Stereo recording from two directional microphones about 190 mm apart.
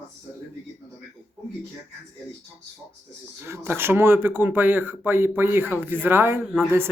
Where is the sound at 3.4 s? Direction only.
10° right (ahead or behind).